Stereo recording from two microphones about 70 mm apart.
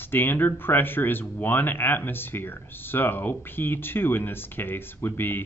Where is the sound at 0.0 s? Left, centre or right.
Left.